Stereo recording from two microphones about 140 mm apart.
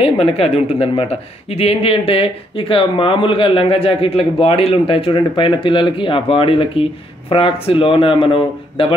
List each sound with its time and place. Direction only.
0.0 s speech: 45° left (ahead or behind)